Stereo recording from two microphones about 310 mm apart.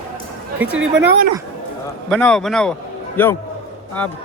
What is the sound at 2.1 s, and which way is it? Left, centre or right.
A man's voice, centre.